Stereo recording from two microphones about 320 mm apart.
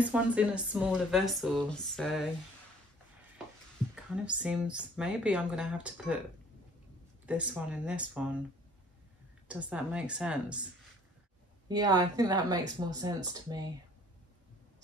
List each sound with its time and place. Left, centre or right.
0.0 s speech: centre
3.9 s speech: centre
7.2 s speech: centre
9.5 s speech: centre
11.7 s speech: centre